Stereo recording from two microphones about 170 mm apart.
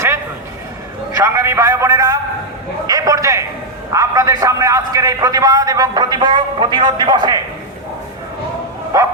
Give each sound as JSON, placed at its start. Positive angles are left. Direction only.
{"t": 1.1, "sound": "a sound", "side_deg": -15}
{"t": 3.9, "sound": "a man's voice", "side_deg": -20}
{"t": 8.9, "sound": "a man's voice", "side_deg": -20}